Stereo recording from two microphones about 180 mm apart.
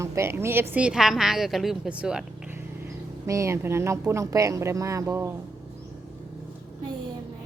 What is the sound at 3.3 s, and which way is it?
A woman's voice, 15° right (ahead or behind).